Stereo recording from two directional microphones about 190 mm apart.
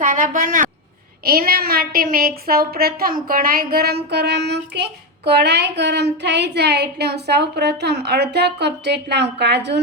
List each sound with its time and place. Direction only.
0.0 s a woman's voice: 45° right (ahead or behind); by 9.8 s 65° right (ahead or behind)